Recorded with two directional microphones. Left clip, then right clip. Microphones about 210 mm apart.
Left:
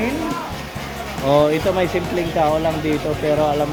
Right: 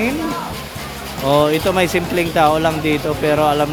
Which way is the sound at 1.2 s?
5° right (ahead or behind).